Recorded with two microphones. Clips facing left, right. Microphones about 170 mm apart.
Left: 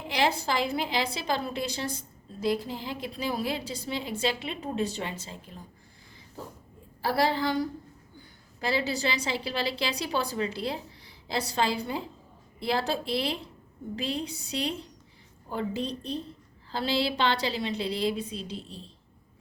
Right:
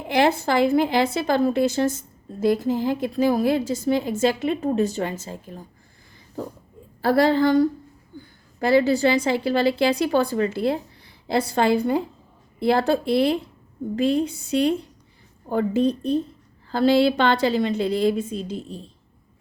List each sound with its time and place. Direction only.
0.1 s a woman's voice: 55° right (ahead or behind)
7.0 s a woman's voice: 55° right (ahead or behind)